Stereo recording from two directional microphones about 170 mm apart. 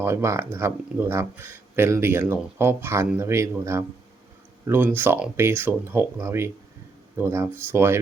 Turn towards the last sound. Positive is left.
turn(degrees=-15)  # may be behind; listen again after turning